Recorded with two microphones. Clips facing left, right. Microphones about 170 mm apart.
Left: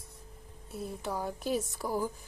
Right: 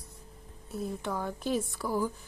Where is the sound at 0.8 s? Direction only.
5° left (ahead or behind).